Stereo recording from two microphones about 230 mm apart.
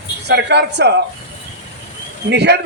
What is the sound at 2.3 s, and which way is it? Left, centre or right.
Speech, right.